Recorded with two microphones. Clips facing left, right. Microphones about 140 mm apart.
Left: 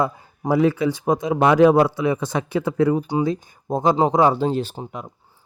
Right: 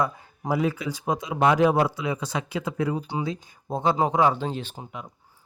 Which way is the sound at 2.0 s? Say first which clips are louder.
Left 7 dB; 50° left (ahead or behind).